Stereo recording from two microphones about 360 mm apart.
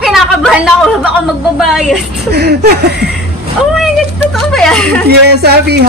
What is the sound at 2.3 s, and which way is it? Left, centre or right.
Speech, right.